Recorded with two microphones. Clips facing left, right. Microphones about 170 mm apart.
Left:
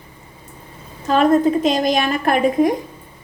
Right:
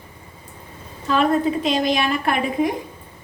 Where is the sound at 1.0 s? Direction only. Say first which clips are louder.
Left 4 dB; 45° left (ahead or behind).